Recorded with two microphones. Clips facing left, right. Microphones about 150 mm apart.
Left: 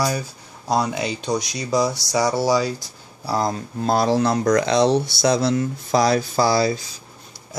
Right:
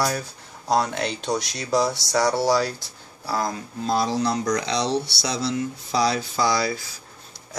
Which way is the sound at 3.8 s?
60° left (ahead or behind).